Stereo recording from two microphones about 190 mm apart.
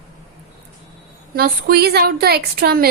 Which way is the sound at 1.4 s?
55° right (ahead or behind).